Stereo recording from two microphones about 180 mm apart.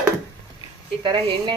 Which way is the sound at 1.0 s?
25° right (ahead or behind).